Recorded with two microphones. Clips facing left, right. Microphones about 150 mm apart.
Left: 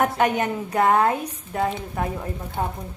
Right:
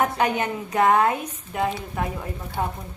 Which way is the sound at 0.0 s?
45° left (ahead or behind).